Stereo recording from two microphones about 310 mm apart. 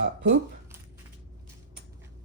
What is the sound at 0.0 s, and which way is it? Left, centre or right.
Speech, right.